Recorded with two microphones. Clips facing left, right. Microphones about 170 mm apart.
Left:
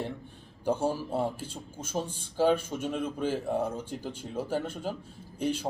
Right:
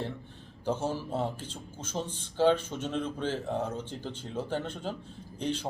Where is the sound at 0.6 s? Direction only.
15° left (ahead or behind).